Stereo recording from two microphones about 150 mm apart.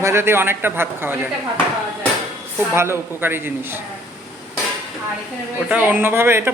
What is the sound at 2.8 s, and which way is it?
Speech, 15° right (ahead or behind).